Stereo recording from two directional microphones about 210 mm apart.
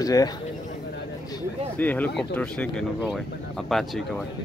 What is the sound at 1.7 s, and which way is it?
Speech, 10° left (ahead or behind).